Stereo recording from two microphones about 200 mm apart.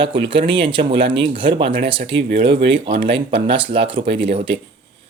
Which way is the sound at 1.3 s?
25° right (ahead or behind).